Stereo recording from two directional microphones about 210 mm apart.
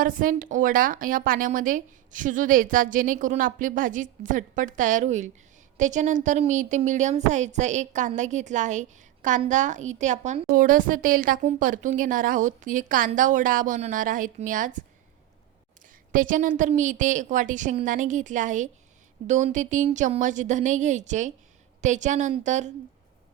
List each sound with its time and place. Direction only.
0.0 s a woman's voice: 40° right (ahead or behind)
16.1 s a woman's voice: 40° right (ahead or behind)